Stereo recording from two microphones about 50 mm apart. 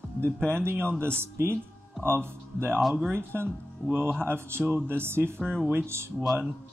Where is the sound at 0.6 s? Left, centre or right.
Right.